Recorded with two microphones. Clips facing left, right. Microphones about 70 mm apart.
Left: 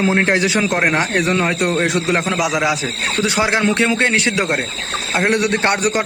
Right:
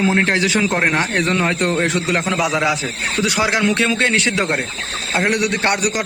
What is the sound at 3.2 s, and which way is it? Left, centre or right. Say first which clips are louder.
Speech: left 1 dB; left.